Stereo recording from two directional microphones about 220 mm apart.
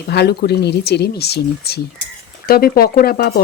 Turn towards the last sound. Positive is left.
turn(degrees=45)  # may be behind; listen again after turning